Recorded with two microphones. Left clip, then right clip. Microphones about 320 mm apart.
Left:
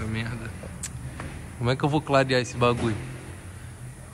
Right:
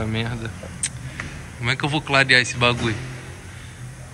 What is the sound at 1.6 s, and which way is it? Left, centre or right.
A man's voice, centre.